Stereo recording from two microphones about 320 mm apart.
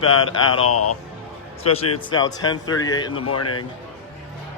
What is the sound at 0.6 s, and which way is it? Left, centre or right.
Speech, left.